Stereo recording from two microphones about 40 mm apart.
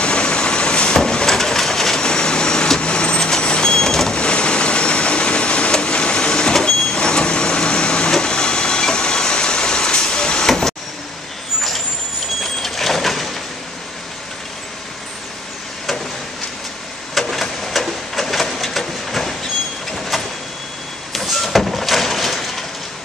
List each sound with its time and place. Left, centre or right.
0.0 s vehicle: left
4.2 s vehicle: left
12.6 s a sound: centre
17.1 s printer: centre
19.9 s vehicle: centre
21.1 s printer: centre